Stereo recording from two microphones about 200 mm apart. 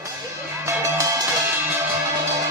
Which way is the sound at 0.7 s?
15° right (ahead or behind).